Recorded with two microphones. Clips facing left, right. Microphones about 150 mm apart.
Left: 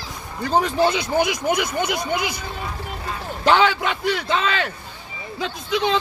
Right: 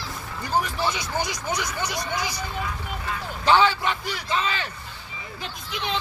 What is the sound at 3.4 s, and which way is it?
A man's voice, 80° left.